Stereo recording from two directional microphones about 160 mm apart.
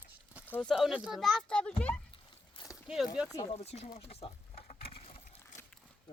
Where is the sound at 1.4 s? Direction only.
5° left (ahead or behind).